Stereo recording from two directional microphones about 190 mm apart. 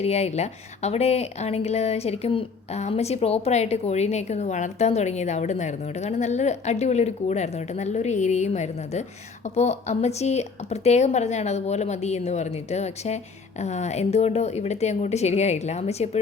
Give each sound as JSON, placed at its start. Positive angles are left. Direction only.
{"t": 0.0, "sound": "speech", "side_deg": 35}